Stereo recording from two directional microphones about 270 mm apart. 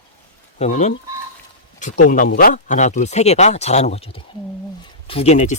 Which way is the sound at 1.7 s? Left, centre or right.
Left.